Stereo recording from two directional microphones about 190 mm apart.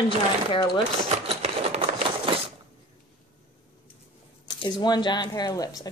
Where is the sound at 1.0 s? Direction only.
35° right (ahead or behind).